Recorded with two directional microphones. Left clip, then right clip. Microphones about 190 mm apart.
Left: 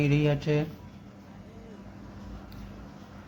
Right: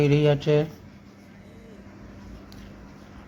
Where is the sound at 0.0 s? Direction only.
20° right (ahead or behind).